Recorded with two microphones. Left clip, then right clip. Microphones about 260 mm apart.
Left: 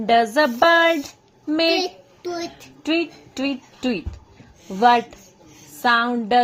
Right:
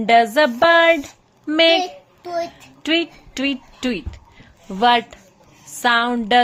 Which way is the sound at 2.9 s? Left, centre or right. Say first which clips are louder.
Right 3 dB; centre.